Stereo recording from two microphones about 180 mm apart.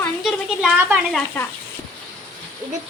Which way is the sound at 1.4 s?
10° left (ahead or behind).